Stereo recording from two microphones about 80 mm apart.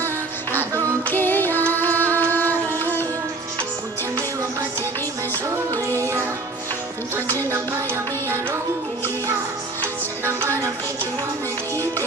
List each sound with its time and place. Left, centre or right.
0.7 s music: right
1.1 s music: left
5.9 s music: right
7.3 s music: right
9.8 s music: right